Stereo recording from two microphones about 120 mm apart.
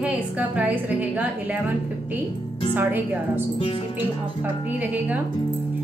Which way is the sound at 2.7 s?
15° right (ahead or behind).